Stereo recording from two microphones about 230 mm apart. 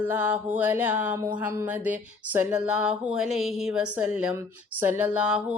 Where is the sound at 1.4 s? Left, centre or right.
Centre.